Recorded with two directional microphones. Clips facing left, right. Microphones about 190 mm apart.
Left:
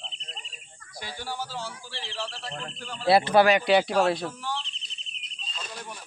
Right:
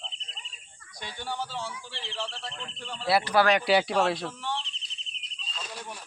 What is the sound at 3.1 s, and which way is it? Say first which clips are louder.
Speech: left 4 dB; 25° left (ahead or behind).